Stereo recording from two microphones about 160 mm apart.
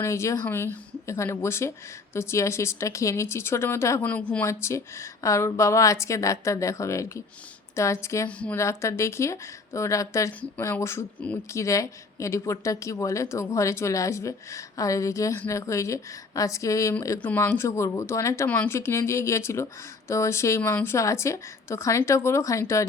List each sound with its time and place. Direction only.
0.0 s a woman's voice: 15° left (ahead or behind)